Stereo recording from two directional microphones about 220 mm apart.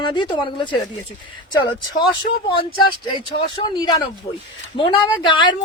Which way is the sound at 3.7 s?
20° left (ahead or behind).